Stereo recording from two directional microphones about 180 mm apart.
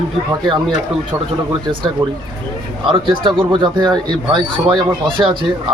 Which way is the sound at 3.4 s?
25° right (ahead or behind).